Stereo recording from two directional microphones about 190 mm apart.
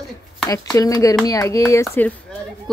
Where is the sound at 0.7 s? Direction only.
15° left (ahead or behind).